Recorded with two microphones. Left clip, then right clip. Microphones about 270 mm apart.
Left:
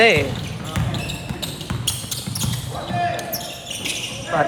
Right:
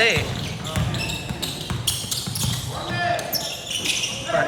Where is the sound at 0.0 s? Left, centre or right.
Left.